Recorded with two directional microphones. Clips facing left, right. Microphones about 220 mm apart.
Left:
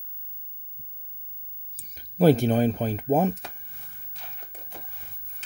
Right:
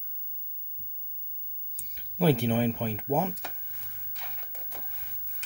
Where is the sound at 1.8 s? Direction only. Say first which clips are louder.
Left 7 dB; 45° left (ahead or behind).